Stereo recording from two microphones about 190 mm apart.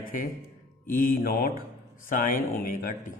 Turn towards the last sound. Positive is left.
turn(degrees=45)  # may be behind; listen again after turning